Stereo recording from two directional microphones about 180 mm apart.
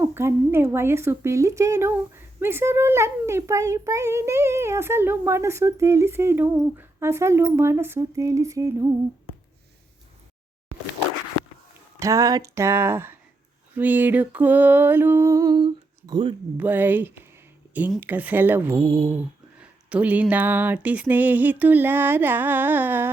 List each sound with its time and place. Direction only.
0.0 s a woman's voice: 15° right (ahead or behind)
11.9 s a woman's voice: 20° right (ahead or behind)
16.6 s a woman's voice: 10° right (ahead or behind)